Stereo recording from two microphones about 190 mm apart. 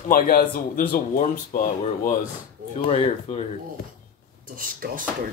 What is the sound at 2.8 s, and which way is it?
Speech, 30° left (ahead or behind).